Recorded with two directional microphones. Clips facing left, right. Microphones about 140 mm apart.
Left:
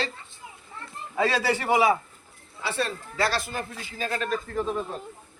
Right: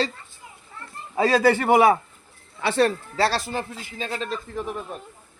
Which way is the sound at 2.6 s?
70° right (ahead or behind).